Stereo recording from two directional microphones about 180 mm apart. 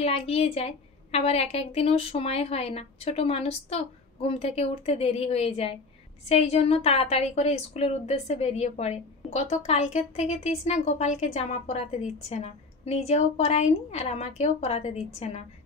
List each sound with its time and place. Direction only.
0.0 s a woman's voice: 35° left (ahead or behind)